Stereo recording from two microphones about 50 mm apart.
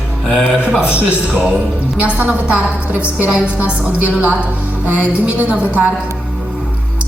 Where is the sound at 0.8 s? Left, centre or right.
Right.